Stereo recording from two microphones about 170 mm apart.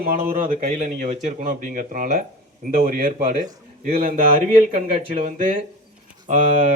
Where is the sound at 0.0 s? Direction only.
55° right (ahead or behind).